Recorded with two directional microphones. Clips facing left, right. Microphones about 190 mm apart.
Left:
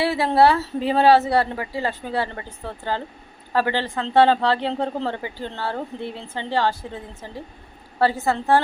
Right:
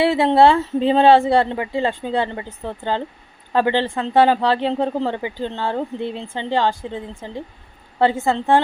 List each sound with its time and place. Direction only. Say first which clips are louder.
0.0 s speech: right 4 dB; 25° right (ahead or behind)